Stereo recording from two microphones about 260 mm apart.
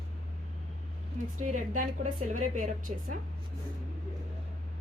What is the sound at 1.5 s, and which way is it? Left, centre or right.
A woman's voice, right.